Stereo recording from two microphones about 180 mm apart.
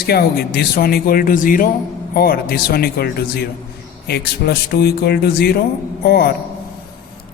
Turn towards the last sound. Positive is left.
turn(degrees=60)  # may be behind; listen again after turning